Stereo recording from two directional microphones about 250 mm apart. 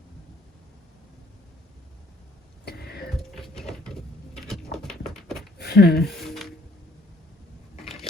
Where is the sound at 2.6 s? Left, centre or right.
Left.